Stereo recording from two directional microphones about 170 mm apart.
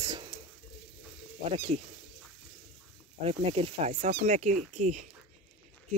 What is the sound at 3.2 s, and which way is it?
Speech, 35° right (ahead or behind).